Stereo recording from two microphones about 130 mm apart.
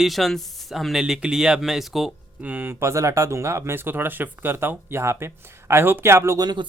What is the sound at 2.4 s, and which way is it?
Speech, 15° right (ahead or behind).